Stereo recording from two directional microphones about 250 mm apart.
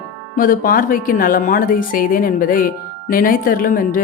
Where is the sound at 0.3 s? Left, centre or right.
Left.